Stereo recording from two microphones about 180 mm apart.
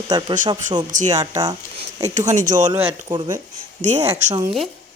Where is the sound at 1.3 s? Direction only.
20° right (ahead or behind).